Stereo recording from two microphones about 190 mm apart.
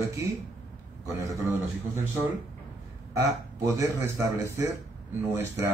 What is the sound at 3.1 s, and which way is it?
A man's voice, 15° right (ahead or behind).